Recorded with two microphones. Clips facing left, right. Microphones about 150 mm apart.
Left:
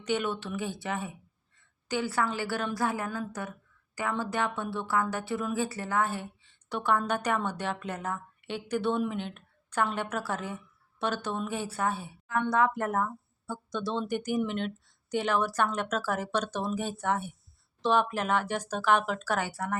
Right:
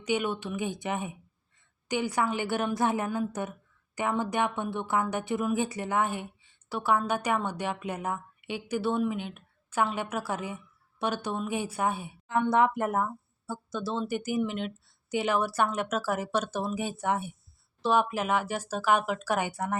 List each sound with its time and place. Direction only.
0.0 s a woman's voice: 10° right (ahead or behind)